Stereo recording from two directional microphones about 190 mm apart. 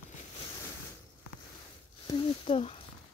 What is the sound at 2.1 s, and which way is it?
Speech, 30° left (ahead or behind).